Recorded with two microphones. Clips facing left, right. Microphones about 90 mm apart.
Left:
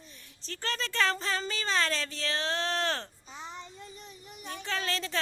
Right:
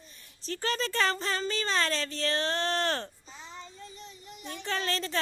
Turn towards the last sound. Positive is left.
turn(degrees=0)  # may be behind; listen again after turning